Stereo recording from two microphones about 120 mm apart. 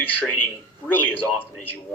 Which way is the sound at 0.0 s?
15° left (ahead or behind).